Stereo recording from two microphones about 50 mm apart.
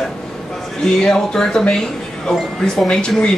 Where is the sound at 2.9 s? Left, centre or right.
Centre.